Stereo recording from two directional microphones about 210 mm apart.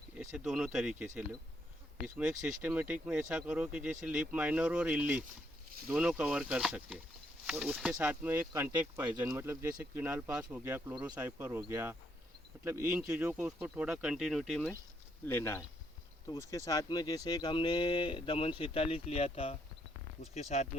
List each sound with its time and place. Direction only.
0.3 s speech: centre (ahead or behind)
2.6 s speech: 10° right (ahead or behind)
15.3 s speech: 10° left (ahead or behind); by 20.7 s 30° left (ahead or behind)